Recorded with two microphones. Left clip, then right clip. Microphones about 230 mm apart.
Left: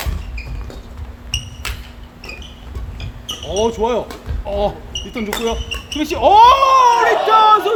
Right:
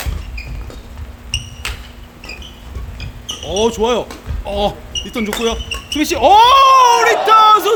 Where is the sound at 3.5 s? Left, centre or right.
Right.